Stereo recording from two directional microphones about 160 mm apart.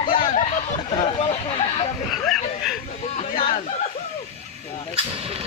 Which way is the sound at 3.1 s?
30° left (ahead or behind).